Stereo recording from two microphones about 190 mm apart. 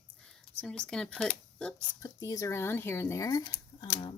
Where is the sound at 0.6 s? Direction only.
5° left (ahead or behind).